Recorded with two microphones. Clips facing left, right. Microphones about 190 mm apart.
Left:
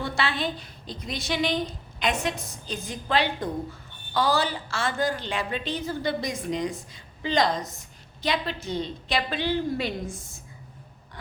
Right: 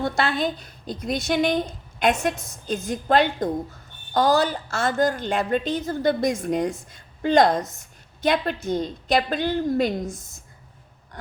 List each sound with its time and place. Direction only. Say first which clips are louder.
0.0 s a woman's voice: right 5 dB; 45° right (ahead or behind)